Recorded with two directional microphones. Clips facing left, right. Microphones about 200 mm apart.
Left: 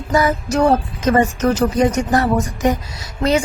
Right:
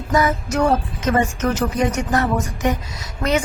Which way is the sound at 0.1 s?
30° left (ahead or behind).